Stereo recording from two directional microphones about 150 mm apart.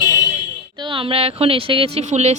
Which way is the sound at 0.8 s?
35° right (ahead or behind).